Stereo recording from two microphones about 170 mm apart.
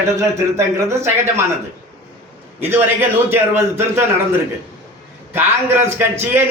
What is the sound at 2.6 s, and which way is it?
Speech, 10° right (ahead or behind).